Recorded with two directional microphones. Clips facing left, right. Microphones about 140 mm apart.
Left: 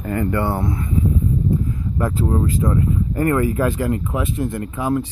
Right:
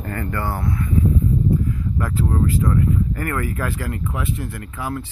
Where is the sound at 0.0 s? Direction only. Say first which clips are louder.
Left 5 dB; 20° left (ahead or behind).